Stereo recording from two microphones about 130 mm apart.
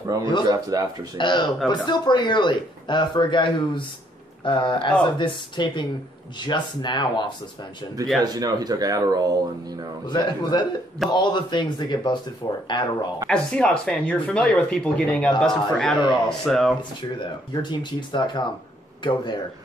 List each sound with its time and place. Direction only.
0.5 s speech: 25° right (ahead or behind)
1.1 s speech: 35° left (ahead or behind)
8.2 s speech: 30° right (ahead or behind)
10.0 s speech: 35° left (ahead or behind)
13.3 s a man's voice: 5° left (ahead or behind)
17.6 s speech: 35° left (ahead or behind)